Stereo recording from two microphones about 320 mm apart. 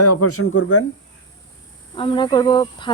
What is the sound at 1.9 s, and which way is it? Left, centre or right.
Speech, centre.